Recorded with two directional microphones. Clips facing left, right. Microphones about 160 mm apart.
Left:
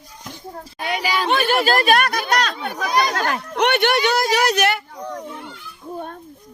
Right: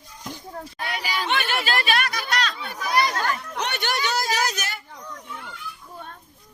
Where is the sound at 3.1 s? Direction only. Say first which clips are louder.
Left 5 dB; 75° left (ahead or behind).